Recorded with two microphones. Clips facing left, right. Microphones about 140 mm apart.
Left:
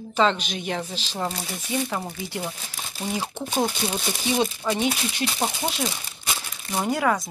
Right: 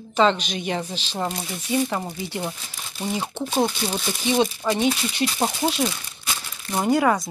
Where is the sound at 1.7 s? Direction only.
Centre (ahead or behind).